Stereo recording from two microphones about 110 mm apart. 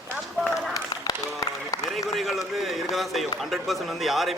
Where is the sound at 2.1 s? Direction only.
Centre (ahead or behind).